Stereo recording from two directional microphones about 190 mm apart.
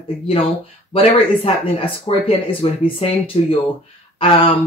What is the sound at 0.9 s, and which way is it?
Speech, 30° left (ahead or behind).